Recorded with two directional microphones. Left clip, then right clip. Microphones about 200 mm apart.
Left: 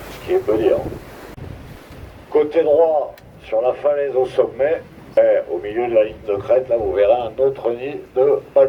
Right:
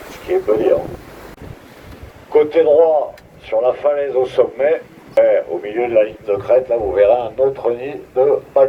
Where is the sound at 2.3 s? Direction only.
35° right (ahead or behind).